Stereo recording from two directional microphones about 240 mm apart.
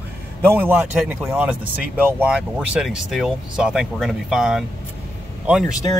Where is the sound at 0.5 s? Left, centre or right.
Centre.